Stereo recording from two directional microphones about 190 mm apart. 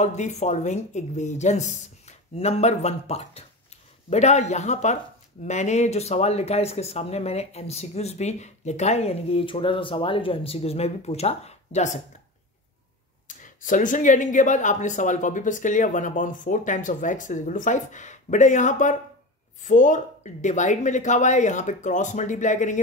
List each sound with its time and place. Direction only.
0.0 s speech: 35° left (ahead or behind)
13.4 s speech: 45° left (ahead or behind)